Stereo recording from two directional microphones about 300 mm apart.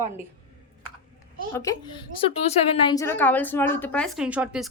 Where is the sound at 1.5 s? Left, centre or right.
Centre.